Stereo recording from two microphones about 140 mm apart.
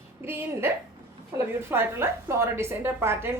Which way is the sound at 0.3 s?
15° right (ahead or behind).